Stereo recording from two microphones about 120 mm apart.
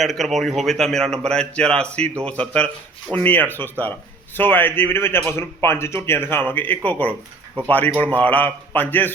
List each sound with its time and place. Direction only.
0.0 s a man's voice: centre (ahead or behind)